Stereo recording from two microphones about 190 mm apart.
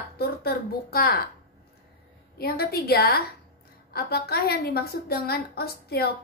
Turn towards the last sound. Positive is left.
turn(degrees=55)  # may be behind; listen again after turning